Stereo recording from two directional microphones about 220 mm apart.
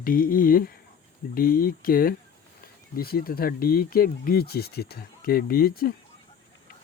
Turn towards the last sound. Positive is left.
turn(degrees=40)  # may be behind; listen again after turning